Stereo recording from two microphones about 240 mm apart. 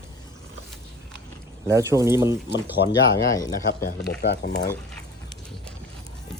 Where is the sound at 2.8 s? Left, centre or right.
Left.